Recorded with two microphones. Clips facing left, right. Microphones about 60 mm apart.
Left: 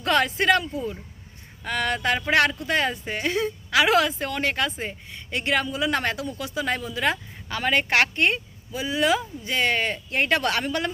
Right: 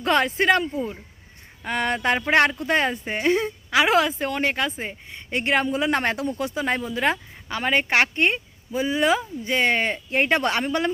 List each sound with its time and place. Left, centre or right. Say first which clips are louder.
0.0 s speech: right 1 dB; right
5.3 s speech: right 3 dB; right
8.7 s speech: right 2 dB; right